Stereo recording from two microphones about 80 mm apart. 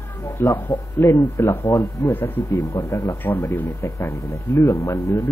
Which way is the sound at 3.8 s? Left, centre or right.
Left.